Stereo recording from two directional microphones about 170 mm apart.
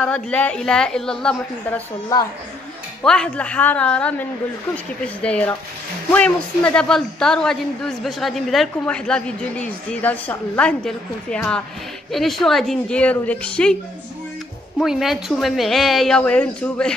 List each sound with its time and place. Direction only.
0.0 s a woman's voice: 5° left (ahead or behind)
2.1 s a woman's voice: 20° left (ahead or behind)
3.0 s a woman's voice: 5° left (ahead or behind)
14.8 s a woman's voice: centre (ahead or behind)